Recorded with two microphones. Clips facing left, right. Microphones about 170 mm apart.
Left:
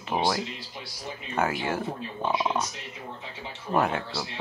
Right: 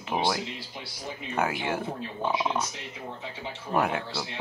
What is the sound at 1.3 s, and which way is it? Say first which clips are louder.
Speech: left 1 dB; 10° right (ahead or behind).